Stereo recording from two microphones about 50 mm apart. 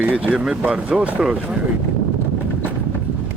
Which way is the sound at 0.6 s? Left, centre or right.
Right.